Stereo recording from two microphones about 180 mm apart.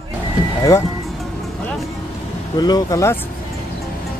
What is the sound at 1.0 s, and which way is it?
Vehicle, centre (ahead or behind).